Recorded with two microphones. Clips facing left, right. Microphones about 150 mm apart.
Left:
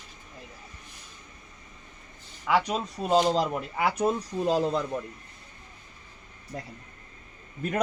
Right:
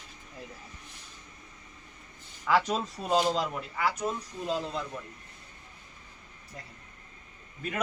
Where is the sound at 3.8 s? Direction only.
60° left (ahead or behind).